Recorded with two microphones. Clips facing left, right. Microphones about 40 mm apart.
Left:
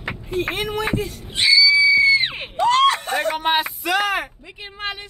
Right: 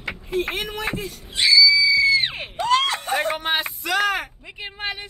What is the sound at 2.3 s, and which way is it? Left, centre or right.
Screaming, centre.